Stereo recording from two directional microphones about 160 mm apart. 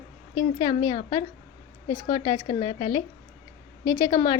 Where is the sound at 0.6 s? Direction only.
25° left (ahead or behind).